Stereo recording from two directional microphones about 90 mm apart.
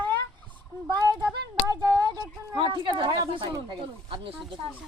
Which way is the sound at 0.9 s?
45° right (ahead or behind).